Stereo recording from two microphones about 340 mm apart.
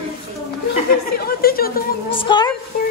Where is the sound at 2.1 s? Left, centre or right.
Centre.